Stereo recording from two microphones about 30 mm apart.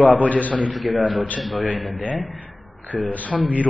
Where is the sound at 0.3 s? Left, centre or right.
Left.